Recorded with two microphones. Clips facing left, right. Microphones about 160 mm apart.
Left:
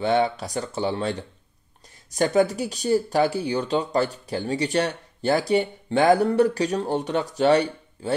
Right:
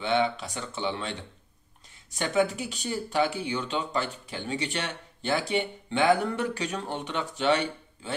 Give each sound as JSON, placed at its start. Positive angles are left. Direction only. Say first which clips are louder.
{"t": 0.0, "sound": "speech", "louder": "left 4 dB", "side_deg": 40}